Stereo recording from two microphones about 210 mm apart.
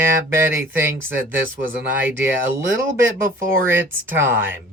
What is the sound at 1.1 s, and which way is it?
Speech, 10° right (ahead or behind).